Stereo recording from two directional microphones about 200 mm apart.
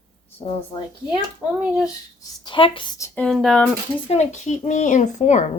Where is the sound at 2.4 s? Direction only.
25° left (ahead or behind).